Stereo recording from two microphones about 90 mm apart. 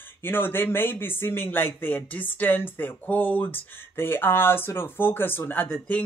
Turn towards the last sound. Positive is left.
turn(degrees=20)  # may be behind; listen again after turning